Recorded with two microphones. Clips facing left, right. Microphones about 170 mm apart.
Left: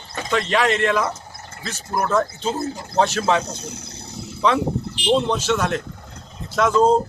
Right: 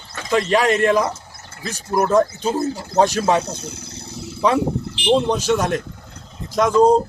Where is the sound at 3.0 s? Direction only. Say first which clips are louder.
Right 3 dB; 15° right (ahead or behind).